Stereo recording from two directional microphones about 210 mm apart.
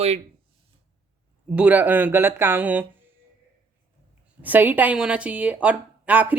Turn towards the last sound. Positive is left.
turn(degrees=-10)  # may be behind; listen again after turning